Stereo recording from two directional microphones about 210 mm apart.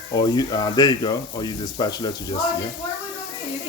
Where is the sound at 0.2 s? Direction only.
20° left (ahead or behind).